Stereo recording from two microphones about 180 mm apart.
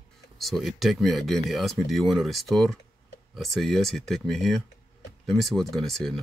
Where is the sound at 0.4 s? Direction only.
Centre (ahead or behind).